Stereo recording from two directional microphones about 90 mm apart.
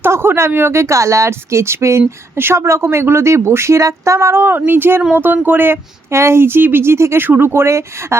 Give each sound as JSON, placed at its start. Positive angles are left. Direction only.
{"t": 0.0, "sound": "a woman's voice", "side_deg": -25}